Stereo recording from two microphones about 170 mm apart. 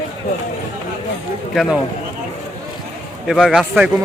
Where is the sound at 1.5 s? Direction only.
Centre (ahead or behind).